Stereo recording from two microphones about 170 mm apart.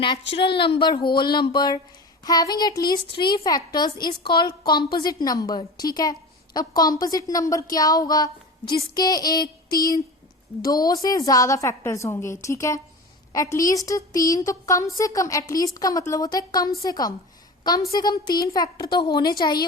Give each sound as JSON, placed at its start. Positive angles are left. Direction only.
{"t": 0.3, "sound": "a woman's voice", "side_deg": 30}